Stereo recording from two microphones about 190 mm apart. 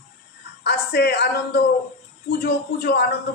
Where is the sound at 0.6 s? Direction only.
60° left (ahead or behind).